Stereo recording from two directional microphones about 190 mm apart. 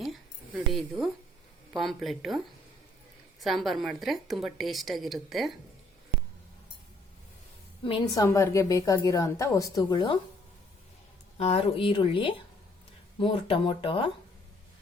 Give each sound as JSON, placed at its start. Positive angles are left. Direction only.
{"t": 0.0, "sound": "a sound", "side_deg": 0}
{"t": 1.7, "sound": "a woman's voice", "side_deg": 0}
{"t": 3.4, "sound": "a woman's voice", "side_deg": 0}
{"t": 7.9, "sound": "a woman's voice", "side_deg": 20}
{"t": 11.3, "sound": "speech", "side_deg": 35}